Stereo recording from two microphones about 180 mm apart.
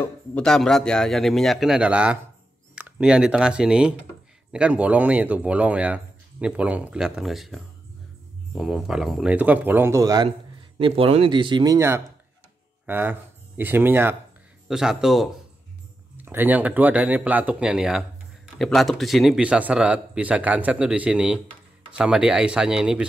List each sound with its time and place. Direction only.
0.0 s a man's voice: 5° left (ahead or behind); by 10.3 s 20° right (ahead or behind)
10.8 s a man's voice: 35° right (ahead or behind); by 23.0 s 5° right (ahead or behind)